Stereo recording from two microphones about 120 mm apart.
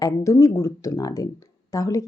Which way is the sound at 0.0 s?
25° left (ahead or behind).